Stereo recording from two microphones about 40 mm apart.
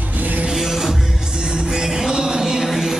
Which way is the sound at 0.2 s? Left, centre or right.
Right.